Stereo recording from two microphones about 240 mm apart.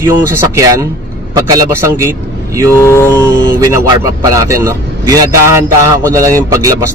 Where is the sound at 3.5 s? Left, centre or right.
Centre.